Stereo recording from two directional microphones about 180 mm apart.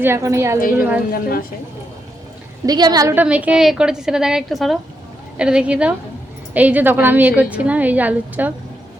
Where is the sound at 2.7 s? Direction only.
20° right (ahead or behind).